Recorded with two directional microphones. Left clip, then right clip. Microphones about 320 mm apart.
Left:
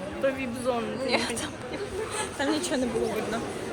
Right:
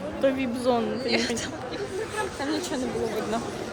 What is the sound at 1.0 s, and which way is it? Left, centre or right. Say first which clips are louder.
Speech: left 3 dB; centre.